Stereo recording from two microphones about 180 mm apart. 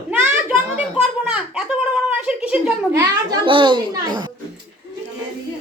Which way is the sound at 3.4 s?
25° right (ahead or behind).